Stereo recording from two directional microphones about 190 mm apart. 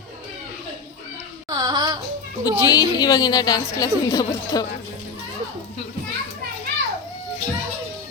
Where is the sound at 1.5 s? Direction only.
20° right (ahead or behind).